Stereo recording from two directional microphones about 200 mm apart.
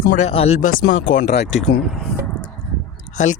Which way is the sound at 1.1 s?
55° left (ahead or behind).